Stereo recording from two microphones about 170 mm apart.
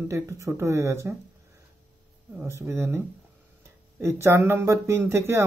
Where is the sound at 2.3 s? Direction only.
15° right (ahead or behind).